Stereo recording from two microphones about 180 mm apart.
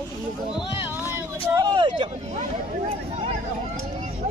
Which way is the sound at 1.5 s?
25° right (ahead or behind).